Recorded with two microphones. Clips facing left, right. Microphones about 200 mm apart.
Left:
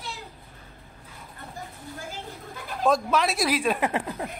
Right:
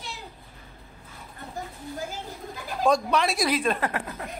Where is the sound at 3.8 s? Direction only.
25° left (ahead or behind).